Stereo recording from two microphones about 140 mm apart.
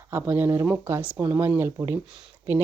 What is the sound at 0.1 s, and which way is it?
Speech, 15° right (ahead or behind).